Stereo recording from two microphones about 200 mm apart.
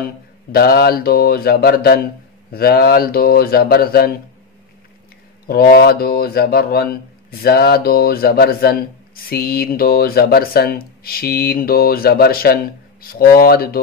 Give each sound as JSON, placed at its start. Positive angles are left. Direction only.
{"t": 0.5, "sound": "speech", "side_deg": 50}
{"t": 5.5, "sound": "speech", "side_deg": 50}